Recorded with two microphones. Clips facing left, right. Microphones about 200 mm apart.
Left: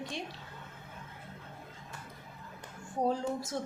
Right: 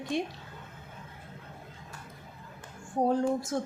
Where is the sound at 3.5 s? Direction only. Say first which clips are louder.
Right 4 dB; 50° right (ahead or behind).